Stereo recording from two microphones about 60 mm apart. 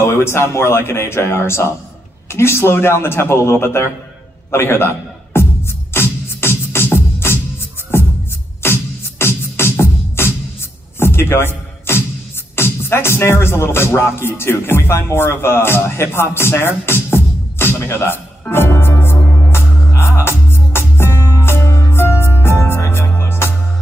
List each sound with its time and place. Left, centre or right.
0.0 s speech: left
4.5 s music: left
8.6 s music: left
17.7 s a man's voice: left
18.5 s music: left
19.9 s music: left
21.9 s music: left